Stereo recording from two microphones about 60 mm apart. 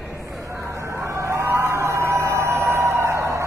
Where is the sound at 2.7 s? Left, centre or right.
Right.